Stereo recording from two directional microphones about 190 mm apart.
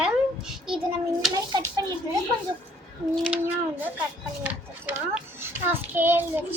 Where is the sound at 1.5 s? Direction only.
20° right (ahead or behind).